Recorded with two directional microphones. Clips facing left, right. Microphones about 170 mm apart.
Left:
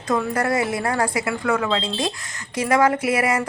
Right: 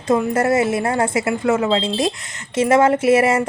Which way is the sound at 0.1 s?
25° right (ahead or behind).